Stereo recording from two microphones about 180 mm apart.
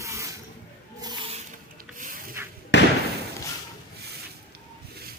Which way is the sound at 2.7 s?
75° left (ahead or behind).